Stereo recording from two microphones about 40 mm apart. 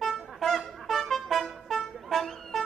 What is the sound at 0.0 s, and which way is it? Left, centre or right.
Trumpet, centre.